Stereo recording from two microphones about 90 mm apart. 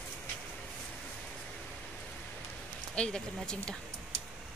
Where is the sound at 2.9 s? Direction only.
10° left (ahead or behind).